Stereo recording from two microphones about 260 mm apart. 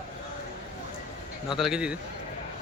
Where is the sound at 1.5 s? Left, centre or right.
Centre.